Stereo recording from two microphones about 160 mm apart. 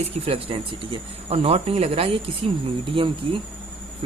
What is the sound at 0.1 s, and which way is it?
Speech, 35° right (ahead or behind).